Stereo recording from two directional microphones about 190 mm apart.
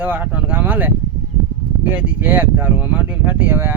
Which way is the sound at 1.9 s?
10° right (ahead or behind).